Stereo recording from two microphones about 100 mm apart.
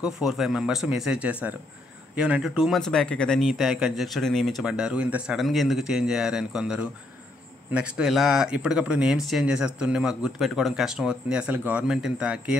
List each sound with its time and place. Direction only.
0.0 s speech: 5° right (ahead or behind)